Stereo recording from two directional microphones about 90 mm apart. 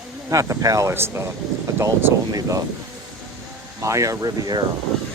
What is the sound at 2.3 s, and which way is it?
Speech, 40° right (ahead or behind).